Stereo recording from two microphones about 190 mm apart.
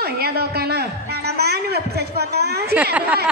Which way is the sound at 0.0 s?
55° right (ahead or behind).